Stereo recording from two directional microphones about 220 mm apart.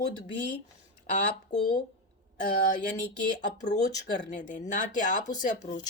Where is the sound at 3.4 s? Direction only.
35° left (ahead or behind).